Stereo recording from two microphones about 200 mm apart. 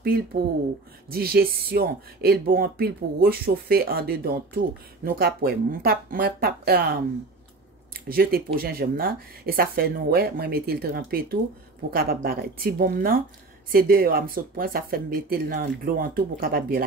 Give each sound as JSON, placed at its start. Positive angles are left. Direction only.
{"t": 0.0, "sound": "speech", "side_deg": -50}